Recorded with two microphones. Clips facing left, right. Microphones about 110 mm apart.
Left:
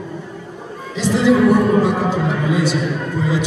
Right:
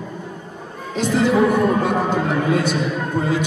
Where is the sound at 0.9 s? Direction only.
50° right (ahead or behind).